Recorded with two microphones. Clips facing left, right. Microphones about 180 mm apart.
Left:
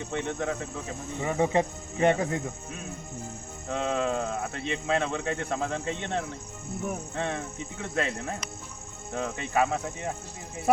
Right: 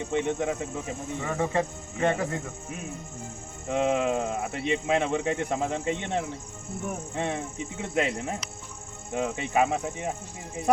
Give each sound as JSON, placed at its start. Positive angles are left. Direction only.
{"t": 0.1, "sound": "speech", "side_deg": -15}
{"t": 1.2, "sound": "speech", "side_deg": 15}
{"t": 3.7, "sound": "speech", "side_deg": -15}